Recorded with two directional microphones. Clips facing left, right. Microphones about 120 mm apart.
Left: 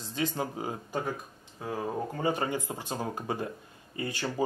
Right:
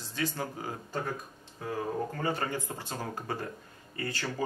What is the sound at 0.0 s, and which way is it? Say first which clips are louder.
Speech: left 2 dB; 20° left (ahead or behind).